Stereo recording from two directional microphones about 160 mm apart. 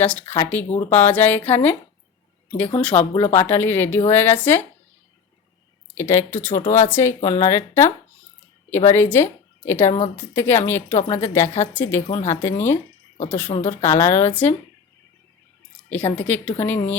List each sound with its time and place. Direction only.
0.0 s speech: 10° left (ahead or behind)
2.8 s speech: 10° left (ahead or behind)
5.9 s a woman's voice: 15° left (ahead or behind)
13.5 s a woman's voice: 45° left (ahead or behind)
13.8 s speech: 15° left (ahead or behind)
15.9 s speech: 10° left (ahead or behind)